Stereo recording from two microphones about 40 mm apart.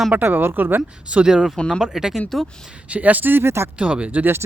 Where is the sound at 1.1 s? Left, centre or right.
Right.